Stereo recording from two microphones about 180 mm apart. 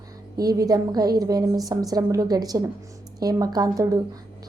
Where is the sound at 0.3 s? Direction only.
20° right (ahead or behind).